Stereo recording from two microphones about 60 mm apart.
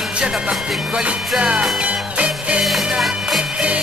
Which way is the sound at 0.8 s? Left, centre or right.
Centre.